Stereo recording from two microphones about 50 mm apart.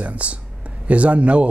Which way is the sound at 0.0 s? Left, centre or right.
Right.